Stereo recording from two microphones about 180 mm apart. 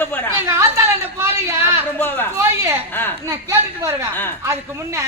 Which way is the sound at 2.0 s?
10° left (ahead or behind).